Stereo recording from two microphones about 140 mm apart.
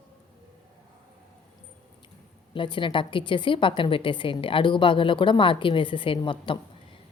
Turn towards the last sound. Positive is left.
turn(degrees=35)  # may be behind; listen again after turning